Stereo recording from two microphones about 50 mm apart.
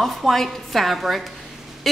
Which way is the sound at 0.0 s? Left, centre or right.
Centre.